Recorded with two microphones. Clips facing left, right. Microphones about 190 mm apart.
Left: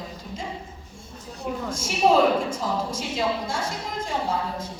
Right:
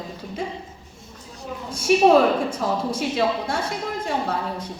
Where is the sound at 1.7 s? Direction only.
65° right (ahead or behind).